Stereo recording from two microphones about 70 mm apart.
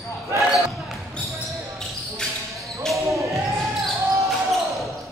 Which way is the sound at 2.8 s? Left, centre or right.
Centre.